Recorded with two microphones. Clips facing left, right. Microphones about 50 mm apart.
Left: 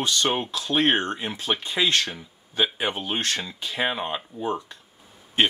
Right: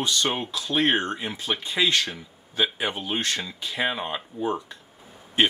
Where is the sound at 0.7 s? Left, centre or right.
Centre.